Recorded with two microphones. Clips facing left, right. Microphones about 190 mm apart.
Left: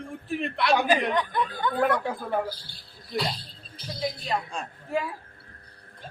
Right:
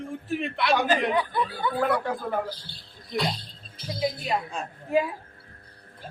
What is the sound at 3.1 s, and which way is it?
Speech, centre (ahead or behind).